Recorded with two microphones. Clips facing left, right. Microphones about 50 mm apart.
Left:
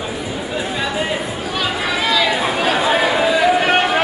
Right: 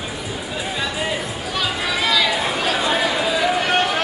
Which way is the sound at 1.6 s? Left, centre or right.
Centre.